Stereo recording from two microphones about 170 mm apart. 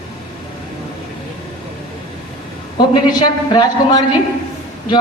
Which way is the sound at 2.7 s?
25° left (ahead or behind).